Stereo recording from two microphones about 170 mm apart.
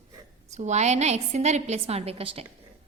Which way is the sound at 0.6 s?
40° right (ahead or behind).